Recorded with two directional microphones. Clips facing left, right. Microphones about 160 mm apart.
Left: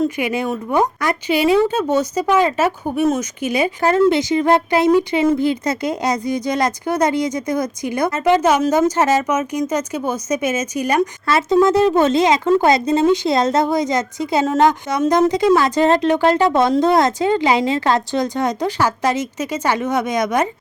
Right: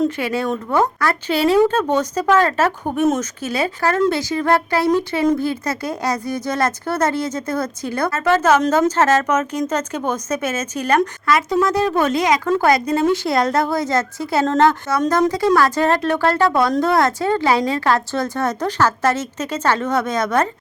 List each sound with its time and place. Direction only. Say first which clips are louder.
0.2 s speech: left 1 dB; 15° left (ahead or behind)
2.9 s speech: even; centre (ahead or behind)
3.2 s speech: left 2 dB; 15° left (ahead or behind)
11.3 s speech: left 4 dB; 25° left (ahead or behind)